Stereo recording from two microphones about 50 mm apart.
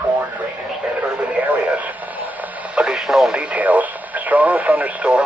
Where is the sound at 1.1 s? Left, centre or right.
Right.